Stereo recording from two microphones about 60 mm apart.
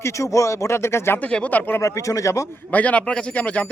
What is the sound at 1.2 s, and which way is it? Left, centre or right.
Speech, left.